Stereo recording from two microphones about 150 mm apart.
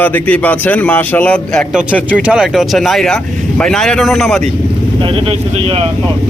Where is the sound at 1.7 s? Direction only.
5° right (ahead or behind).